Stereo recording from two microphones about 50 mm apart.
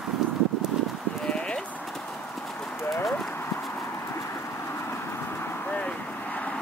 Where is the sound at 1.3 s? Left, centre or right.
Centre.